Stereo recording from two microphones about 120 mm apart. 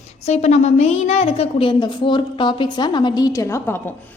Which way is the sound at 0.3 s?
65° left (ahead or behind).